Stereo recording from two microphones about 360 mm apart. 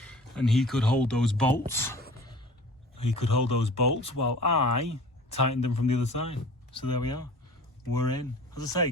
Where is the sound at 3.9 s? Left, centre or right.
Left.